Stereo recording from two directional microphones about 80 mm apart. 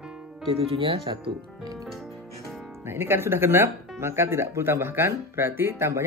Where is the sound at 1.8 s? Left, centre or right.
Centre.